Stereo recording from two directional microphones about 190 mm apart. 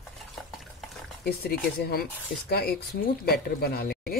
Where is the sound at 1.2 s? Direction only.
55° left (ahead or behind).